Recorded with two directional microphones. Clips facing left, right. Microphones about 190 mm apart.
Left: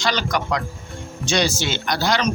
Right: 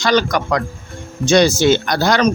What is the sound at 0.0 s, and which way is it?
Speech, 45° right (ahead or behind).